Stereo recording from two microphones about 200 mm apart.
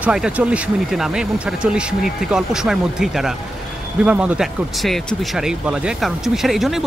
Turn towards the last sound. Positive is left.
turn(degrees=0)  # may be behind; listen again after turning